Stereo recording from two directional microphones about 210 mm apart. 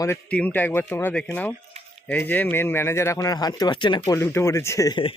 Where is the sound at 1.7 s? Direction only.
30° right (ahead or behind).